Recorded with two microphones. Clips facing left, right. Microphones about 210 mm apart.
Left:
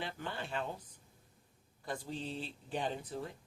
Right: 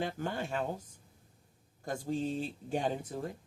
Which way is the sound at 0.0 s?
45° right (ahead or behind).